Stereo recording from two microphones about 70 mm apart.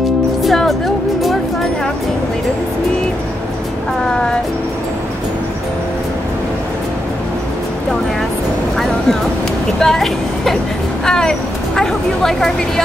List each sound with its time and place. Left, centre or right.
0.4 s music: centre
9.8 s speech: centre